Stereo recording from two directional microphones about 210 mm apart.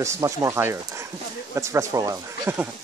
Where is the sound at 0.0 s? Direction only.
15° right (ahead or behind).